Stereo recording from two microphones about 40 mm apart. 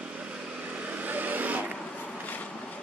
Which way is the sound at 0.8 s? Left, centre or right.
Right.